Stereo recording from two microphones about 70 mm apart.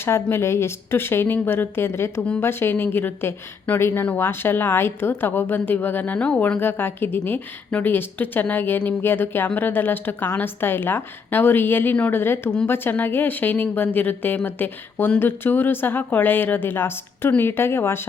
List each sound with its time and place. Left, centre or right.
0.0 s a woman's voice: left; by 6.4 s centre
6.6 s a woman's voice: left